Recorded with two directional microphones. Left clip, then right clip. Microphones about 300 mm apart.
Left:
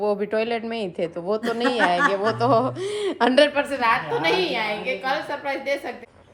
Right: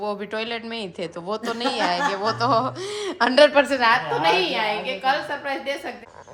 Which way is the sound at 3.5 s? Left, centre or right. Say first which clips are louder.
Right 5 dB; right.